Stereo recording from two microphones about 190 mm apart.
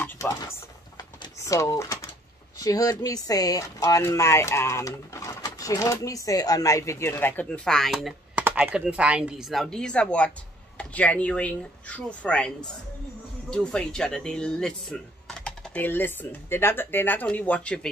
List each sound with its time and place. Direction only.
0.0 s typing: 20° left (ahead or behind)
2.6 s speech: 20° left (ahead or behind)